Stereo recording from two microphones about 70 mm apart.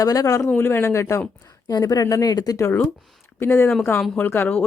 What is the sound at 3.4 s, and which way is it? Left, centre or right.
Speech, left.